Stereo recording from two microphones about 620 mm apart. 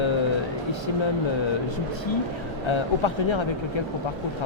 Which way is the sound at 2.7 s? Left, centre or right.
Left.